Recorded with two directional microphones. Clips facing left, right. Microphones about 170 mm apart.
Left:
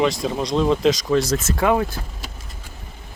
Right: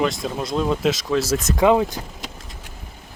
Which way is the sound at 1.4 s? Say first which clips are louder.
Right 3 dB; 15° right (ahead or behind).